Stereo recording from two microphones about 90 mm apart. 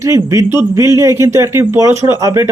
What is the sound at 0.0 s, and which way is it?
Speech, 35° right (ahead or behind).